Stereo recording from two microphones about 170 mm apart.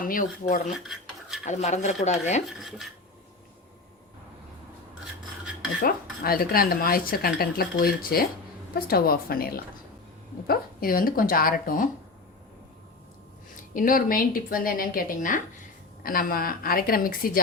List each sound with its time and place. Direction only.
0.0 s speech: 55° left (ahead or behind)
5.8 s speech: 60° left (ahead or behind)
13.7 s speech: 55° left (ahead or behind)